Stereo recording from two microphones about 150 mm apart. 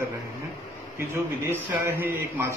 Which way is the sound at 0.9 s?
20° right (ahead or behind).